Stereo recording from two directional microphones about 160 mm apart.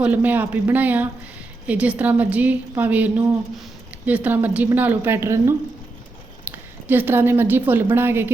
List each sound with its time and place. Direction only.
0.0 s a woman's voice: 10° right (ahead or behind)